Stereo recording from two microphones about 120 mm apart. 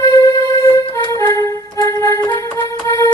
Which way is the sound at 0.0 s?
25° left (ahead or behind).